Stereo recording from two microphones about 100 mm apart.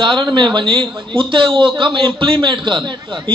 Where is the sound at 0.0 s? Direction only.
50° right (ahead or behind).